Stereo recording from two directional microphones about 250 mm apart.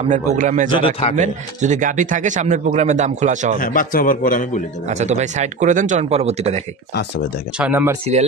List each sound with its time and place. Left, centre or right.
0.3 s a man's voice: right
3.5 s a man's voice: left
4.8 s speech: right
7.5 s speech: centre